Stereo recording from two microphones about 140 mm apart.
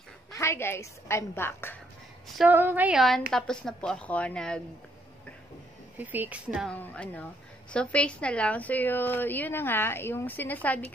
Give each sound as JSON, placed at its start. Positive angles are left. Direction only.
{"t": 0.3, "sound": "a woman's voice", "side_deg": 20}
{"t": 2.4, "sound": "a woman's voice", "side_deg": -15}
{"t": 3.0, "sound": "a woman's voice", "side_deg": 0}
{"t": 5.9, "sound": "a woman's voice", "side_deg": -15}
{"t": 6.8, "sound": "a woman's voice", "side_deg": 10}